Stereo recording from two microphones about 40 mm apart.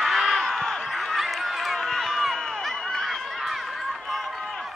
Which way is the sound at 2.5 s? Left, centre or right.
Centre.